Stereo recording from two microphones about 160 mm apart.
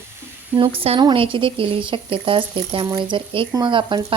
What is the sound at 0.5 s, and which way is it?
A woman's voice, 35° right (ahead or behind).